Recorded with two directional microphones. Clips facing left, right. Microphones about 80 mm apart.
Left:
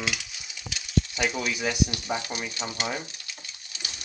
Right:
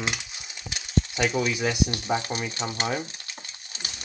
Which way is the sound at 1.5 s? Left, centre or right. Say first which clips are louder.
Right 2 dB; centre.